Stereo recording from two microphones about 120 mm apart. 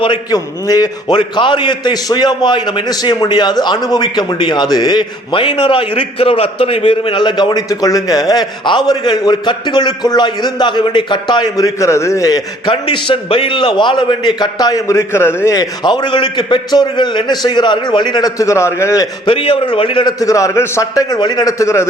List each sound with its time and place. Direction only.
0.0 s a man's voice: 35° left (ahead or behind)
12.7 s a man's voice: 45° left (ahead or behind); by 15.5 s 20° left (ahead or behind)
15.5 s a man's voice: 35° left (ahead or behind)
19.2 s a man's voice: 45° left (ahead or behind)
20.1 s a man's voice: 30° left (ahead or behind)